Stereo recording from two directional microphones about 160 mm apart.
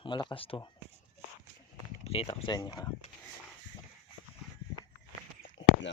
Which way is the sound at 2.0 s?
40° left (ahead or behind).